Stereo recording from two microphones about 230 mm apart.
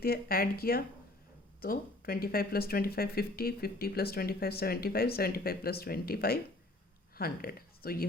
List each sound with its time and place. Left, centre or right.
0.0 s speech: left